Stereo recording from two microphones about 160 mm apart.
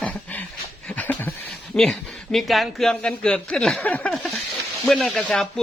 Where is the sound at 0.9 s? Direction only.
10° left (ahead or behind).